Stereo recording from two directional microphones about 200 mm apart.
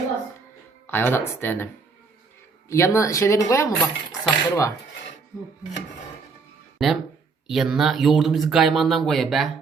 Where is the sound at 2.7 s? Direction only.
15° left (ahead or behind).